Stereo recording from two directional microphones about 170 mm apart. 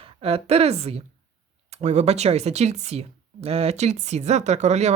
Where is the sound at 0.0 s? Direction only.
35° right (ahead or behind).